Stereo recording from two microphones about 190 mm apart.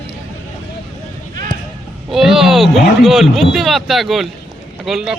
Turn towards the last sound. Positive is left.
turn(degrees=0)  # may be behind; listen again after turning